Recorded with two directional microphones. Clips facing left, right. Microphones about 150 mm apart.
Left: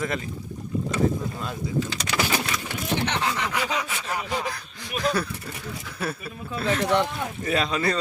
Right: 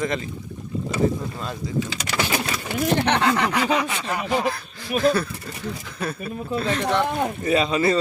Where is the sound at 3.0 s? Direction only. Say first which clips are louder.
Right 7 dB; 65° right (ahead or behind).